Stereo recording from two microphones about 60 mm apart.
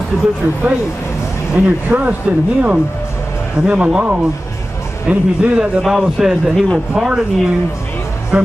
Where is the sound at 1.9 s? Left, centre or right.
Centre.